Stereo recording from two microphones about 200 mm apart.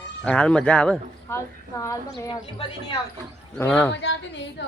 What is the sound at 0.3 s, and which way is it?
A man's voice, 5° left (ahead or behind).